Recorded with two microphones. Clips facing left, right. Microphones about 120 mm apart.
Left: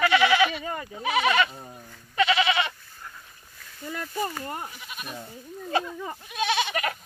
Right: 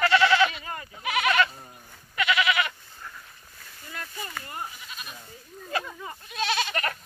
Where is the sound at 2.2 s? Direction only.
30° left (ahead or behind).